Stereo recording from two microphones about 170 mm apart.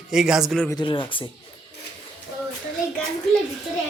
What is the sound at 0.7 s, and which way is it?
Speech, 25° left (ahead or behind).